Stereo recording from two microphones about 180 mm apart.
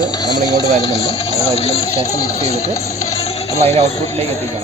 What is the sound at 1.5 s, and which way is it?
Speech, 35° left (ahead or behind).